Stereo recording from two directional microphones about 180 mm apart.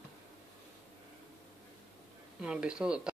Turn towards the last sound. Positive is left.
turn(degrees=-5)  # may be behind; listen again after turning